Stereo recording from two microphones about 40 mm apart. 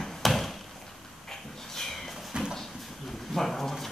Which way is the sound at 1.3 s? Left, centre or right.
Centre.